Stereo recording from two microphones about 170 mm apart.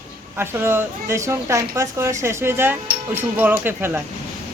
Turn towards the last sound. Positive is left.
turn(degrees=-10)  # may be behind; listen again after turning